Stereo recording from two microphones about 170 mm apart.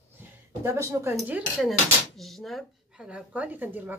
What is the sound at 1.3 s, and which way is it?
Dishes, 5° right (ahead or behind).